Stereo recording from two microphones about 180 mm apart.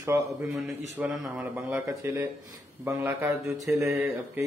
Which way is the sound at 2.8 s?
10° right (ahead or behind).